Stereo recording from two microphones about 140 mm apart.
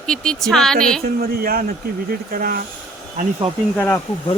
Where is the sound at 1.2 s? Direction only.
90° right.